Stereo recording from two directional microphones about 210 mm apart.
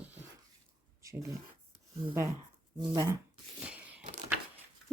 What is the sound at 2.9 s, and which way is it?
Speech, 15° right (ahead or behind).